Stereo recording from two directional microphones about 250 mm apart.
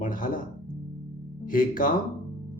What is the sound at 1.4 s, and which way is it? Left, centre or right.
Speech, left.